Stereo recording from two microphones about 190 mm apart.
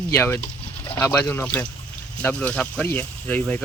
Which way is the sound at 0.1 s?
10° left (ahead or behind).